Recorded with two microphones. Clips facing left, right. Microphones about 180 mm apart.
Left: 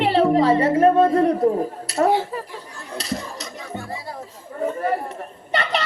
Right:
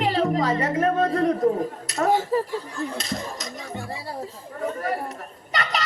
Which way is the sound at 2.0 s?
45° right (ahead or behind).